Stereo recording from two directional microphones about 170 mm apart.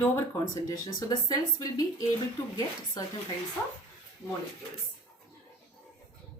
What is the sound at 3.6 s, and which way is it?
Speech, 10° left (ahead or behind).